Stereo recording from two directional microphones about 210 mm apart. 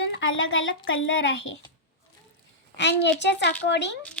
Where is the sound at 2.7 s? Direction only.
55° left (ahead or behind).